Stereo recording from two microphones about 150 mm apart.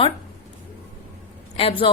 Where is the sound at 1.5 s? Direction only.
40° left (ahead or behind).